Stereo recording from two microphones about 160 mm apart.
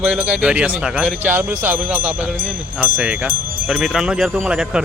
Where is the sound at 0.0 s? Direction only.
10° right (ahead or behind).